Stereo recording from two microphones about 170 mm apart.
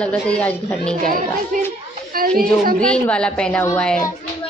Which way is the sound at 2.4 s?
55° right (ahead or behind).